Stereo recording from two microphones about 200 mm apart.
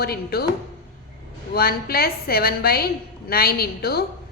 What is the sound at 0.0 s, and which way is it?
Speech, 50° left (ahead or behind).